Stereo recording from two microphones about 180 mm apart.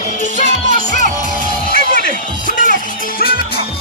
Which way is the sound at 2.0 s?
50° left (ahead or behind).